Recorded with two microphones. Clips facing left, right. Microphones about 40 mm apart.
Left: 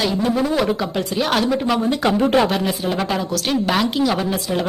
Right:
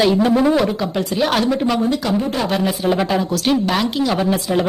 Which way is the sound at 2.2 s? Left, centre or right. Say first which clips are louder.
Left 5 dB; left.